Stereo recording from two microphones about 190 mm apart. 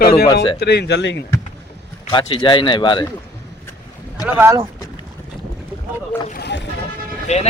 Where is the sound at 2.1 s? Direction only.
25° left (ahead or behind).